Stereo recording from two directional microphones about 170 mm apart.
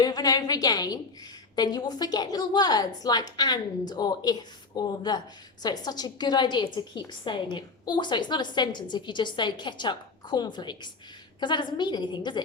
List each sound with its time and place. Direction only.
0.0 s a woman's voice: 20° left (ahead or behind)